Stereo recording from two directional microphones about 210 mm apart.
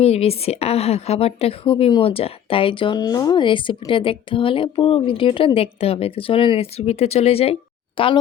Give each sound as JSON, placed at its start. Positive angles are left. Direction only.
{"t": 0.0, "sound": "a woman's voice", "side_deg": 30}